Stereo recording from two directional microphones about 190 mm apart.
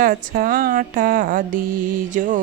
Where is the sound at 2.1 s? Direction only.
40° right (ahead or behind).